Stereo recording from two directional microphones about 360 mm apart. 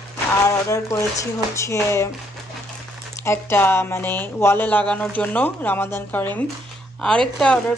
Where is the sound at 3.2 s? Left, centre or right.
Centre.